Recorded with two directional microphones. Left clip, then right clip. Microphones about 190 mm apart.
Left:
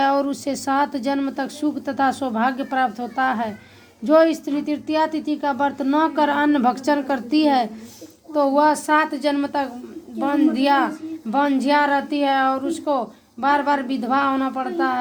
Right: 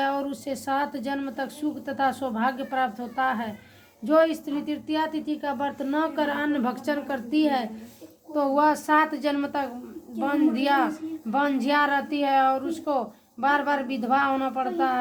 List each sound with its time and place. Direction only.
0.0 s a woman's voice: 40° left (ahead or behind)
8.4 s a woman's voice: 25° left (ahead or behind)